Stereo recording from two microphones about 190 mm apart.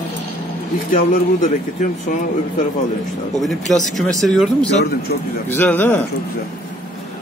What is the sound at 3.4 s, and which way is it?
Speech, centre (ahead or behind).